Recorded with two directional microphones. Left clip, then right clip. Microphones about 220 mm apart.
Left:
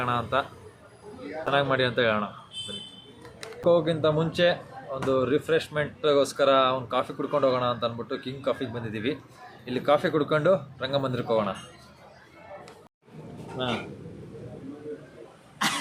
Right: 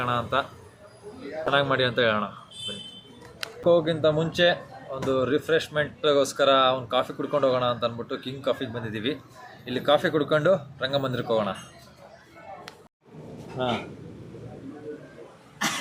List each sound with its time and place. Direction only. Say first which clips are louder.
0.0 s speech: right 1 dB; centre (ahead or behind)
1.5 s speech: right 1 dB; centre (ahead or behind)
3.6 s speech: right 1 dB; 5° left (ahead or behind)
13.6 s speech: right 3 dB; 25° right (ahead or behind)
15.5 s cough: left 1 dB; 10° left (ahead or behind)